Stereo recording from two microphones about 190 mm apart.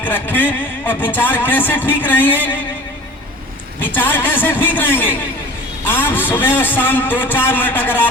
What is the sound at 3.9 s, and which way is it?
A man's voice, 10° left (ahead or behind).